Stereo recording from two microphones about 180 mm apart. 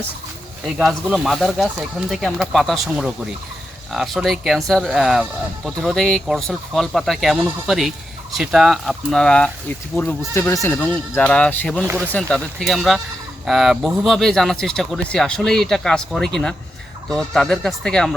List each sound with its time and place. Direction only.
0.6 s speech: centre (ahead or behind)
11.9 s speech: 10° right (ahead or behind)
12.1 s speech: 5° left (ahead or behind)